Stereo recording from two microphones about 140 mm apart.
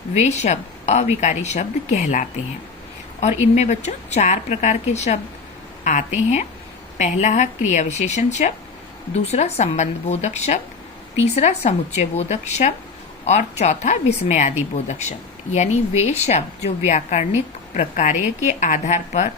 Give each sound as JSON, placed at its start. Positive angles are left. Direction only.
{"t": 0.1, "sound": "a woman's voice", "side_deg": 55}
{"t": 15.5, "sound": "a woman's voice", "side_deg": 55}